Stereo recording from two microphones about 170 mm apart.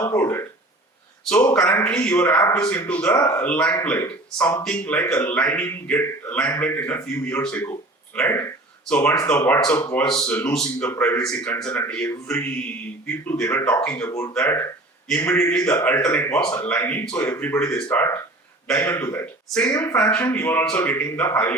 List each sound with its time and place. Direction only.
0.0 s speech: 15° left (ahead or behind)
1.5 s a man's voice: 5° left (ahead or behind)
19.7 s speech: 20° left (ahead or behind)
20.0 s speech: 10° left (ahead or behind)